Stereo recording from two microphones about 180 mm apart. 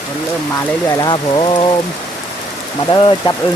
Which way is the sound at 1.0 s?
25° left (ahead or behind).